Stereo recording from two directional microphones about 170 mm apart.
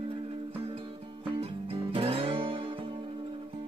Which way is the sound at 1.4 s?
35° right (ahead or behind).